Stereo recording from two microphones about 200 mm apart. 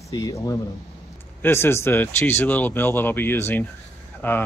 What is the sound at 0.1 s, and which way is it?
Speech, 15° left (ahead or behind).